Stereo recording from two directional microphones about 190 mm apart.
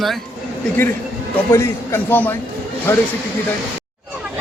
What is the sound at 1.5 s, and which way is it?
Speech, 15° left (ahead or behind).